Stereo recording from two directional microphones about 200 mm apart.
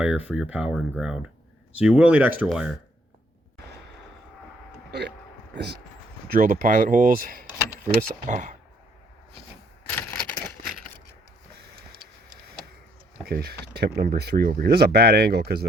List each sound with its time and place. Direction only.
0.0 s speech: 5° right (ahead or behind)
4.9 s speech: 55° right (ahead or behind)
6.4 s speech: 40° right (ahead or behind)
9.9 s a sound: 10° left (ahead or behind)
13.2 s speech: 50° right (ahead or behind)